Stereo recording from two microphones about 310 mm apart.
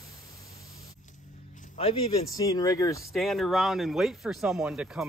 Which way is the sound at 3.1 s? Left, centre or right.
Centre.